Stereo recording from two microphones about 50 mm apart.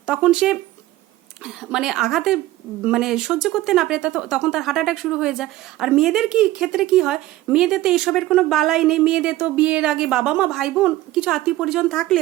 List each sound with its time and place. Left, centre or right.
0.0 s a woman's voice: centre
4.6 s a woman's voice: centre
11.9 s speech: centre